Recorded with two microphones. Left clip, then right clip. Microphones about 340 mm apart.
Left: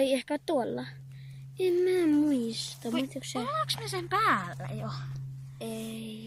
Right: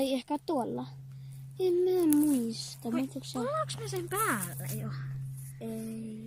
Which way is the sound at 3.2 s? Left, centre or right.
Left.